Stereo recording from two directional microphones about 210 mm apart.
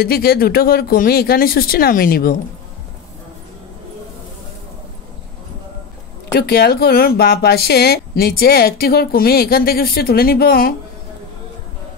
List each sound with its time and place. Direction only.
0.0 s speech: 45° left (ahead or behind)
6.3 s speech: 50° left (ahead or behind)